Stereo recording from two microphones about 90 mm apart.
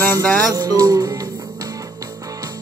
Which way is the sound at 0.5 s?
45° right (ahead or behind).